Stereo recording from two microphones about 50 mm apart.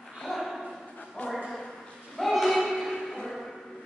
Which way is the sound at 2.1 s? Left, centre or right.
Centre.